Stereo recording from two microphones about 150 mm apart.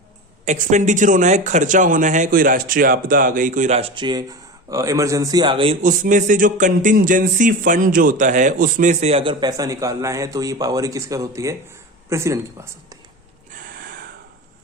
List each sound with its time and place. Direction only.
0.4 s speech: 55° right (ahead or behind)
3.8 s speech: 35° right (ahead or behind)
5.8 s speech: 60° right (ahead or behind); by 9.3 s 40° right (ahead or behind)
9.4 s speech: 25° right (ahead or behind)